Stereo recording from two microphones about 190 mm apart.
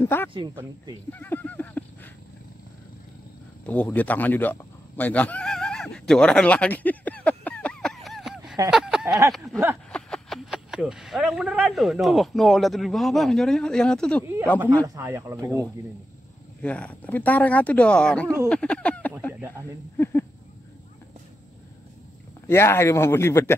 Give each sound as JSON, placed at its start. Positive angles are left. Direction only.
{"t": 0.0, "sound": "speech", "side_deg": 10}
{"t": 1.1, "sound": "a sound", "side_deg": 10}
{"t": 3.6, "sound": "goat", "side_deg": 5}
{"t": 8.6, "sound": "speech", "side_deg": -5}
{"t": 9.5, "sound": "a sound", "side_deg": 0}
{"t": 9.8, "sound": "speech", "side_deg": 5}
{"t": 14.2, "sound": "speech", "side_deg": -15}
{"t": 16.6, "sound": "speech", "side_deg": 5}
{"t": 22.5, "sound": "speech", "side_deg": 15}